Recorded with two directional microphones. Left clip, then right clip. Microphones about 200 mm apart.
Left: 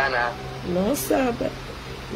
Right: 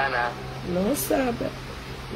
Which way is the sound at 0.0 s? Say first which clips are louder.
Left 2 dB; 30° left (ahead or behind).